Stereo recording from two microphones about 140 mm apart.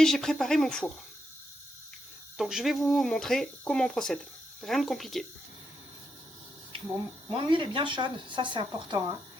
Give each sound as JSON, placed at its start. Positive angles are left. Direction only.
{"t": 0.0, "sound": "speech", "side_deg": 5}
{"t": 2.4, "sound": "speech", "side_deg": 0}
{"t": 7.3, "sound": "speech", "side_deg": -35}